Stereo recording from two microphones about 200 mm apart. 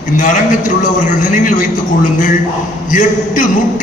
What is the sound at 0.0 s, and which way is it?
A man's voice, 40° left (ahead or behind).